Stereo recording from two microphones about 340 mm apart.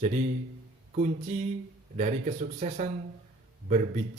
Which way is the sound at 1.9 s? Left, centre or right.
Centre.